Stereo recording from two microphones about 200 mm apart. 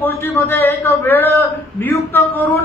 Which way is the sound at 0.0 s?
10° left (ahead or behind).